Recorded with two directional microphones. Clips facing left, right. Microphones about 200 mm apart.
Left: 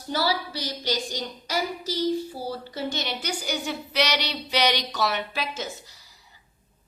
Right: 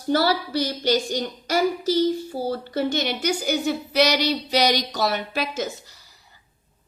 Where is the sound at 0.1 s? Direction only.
55° right (ahead or behind).